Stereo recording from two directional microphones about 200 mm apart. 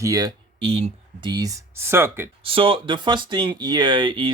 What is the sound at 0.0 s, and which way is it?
Speech, 20° right (ahead or behind).